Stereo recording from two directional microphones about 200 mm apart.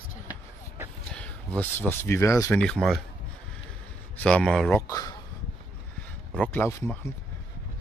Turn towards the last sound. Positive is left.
turn(degrees=15)  # may be behind; listen again after turning